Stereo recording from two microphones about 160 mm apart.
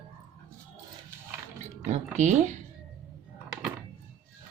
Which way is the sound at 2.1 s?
50° right (ahead or behind).